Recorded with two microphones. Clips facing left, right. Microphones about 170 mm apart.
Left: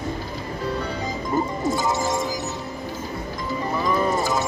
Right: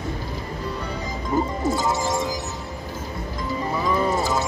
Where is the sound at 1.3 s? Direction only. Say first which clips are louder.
Right 1 dB; 10° right (ahead or behind).